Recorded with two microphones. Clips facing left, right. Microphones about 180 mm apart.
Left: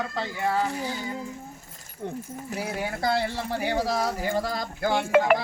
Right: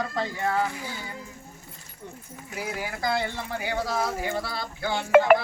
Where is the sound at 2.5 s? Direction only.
35° left (ahead or behind).